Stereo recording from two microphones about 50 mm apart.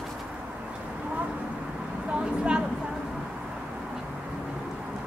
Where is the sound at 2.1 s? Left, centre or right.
Centre.